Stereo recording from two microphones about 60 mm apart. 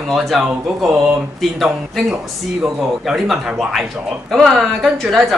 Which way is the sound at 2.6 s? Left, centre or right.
Centre.